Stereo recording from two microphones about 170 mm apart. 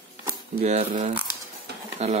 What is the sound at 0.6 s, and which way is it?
Speech, 40° right (ahead or behind).